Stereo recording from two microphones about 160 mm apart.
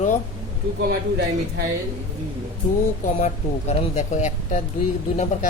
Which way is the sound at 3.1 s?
45° left (ahead or behind).